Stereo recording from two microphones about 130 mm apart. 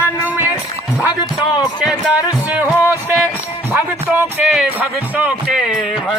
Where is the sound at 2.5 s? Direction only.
10° right (ahead or behind).